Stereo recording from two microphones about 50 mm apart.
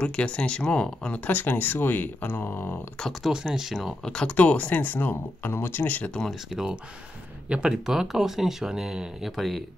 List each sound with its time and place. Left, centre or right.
0.0 s speech: left
1.3 s speech: left
3.1 s speech: centre
3.3 s speech: centre
4.0 s speech: centre
4.4 s speech: left
5.1 s speech: left
6.5 s speech: centre
7.4 s speech: right
7.8 s speech: centre
9.3 s speech: centre